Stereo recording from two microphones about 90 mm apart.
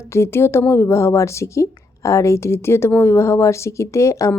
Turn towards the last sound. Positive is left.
turn(degrees=35)  # may be behind; listen again after turning